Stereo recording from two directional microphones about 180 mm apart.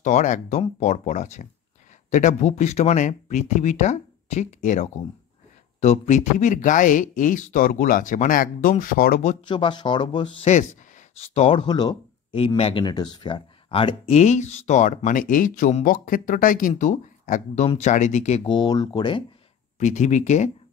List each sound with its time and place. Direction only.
0.0 s speech: 45° left (ahead or behind)
9.5 s speech: 25° left (ahead or behind)
10.5 s speech: 40° left (ahead or behind)
18.4 s speech: 25° left (ahead or behind)
19.8 s speech: 40° left (ahead or behind)